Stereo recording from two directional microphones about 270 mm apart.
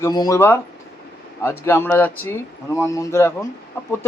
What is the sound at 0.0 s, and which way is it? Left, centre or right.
A man's voice, centre.